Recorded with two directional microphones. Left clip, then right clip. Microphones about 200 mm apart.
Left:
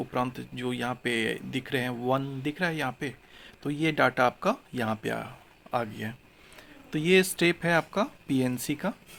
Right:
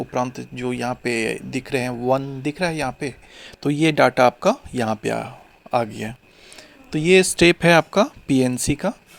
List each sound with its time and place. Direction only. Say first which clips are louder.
0.0 s speech: right 6 dB; 20° right (ahead or behind)